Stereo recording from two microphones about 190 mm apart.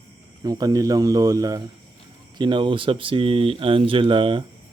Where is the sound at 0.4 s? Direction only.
20° right (ahead or behind).